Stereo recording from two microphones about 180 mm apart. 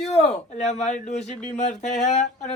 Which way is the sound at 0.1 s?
35° left (ahead or behind).